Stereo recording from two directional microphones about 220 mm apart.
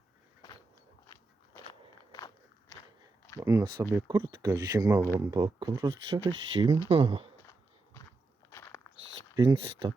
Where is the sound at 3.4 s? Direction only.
15° right (ahead or behind).